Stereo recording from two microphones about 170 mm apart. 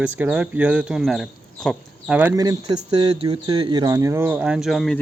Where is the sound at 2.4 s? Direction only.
20° right (ahead or behind).